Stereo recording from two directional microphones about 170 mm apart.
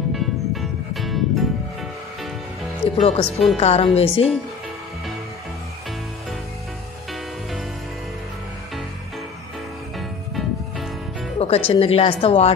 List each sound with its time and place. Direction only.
0.1 s music: centre (ahead or behind)
2.8 s a woman's voice: 40° left (ahead or behind)
3.3 s a woman's voice: centre (ahead or behind)
3.5 s a woman's voice: 35° left (ahead or behind)
9.9 s music: centre (ahead or behind)
11.3 s music: 35° left (ahead or behind)
11.7 s a woman's voice: 35° left (ahead or behind)